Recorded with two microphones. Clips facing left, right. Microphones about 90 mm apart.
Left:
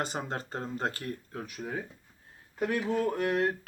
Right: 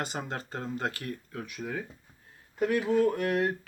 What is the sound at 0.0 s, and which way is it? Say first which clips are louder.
Speech: left 1 dB; 35° left (ahead or behind).